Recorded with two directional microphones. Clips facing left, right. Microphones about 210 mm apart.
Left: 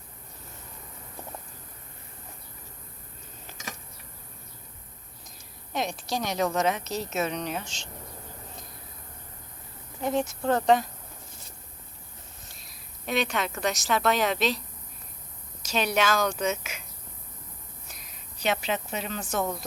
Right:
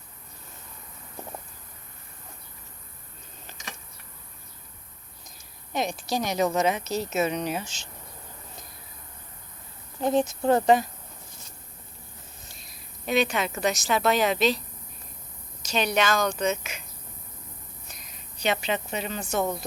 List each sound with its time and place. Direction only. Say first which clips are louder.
5.7 s a woman's voice: right 2 dB; centre (ahead or behind)
10.0 s speech: right 4 dB; 30° right (ahead or behind)
10.2 s speech: right 4 dB; 15° right (ahead or behind)
12.5 s a woman's voice: right 1 dB; centre (ahead or behind)
15.6 s a woman's voice: right 1 dB; 5° left (ahead or behind)
17.8 s a woman's voice: right 1 dB; 5° left (ahead or behind)